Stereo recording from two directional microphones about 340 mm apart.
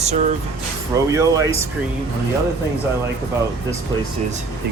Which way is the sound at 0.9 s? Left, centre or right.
Centre.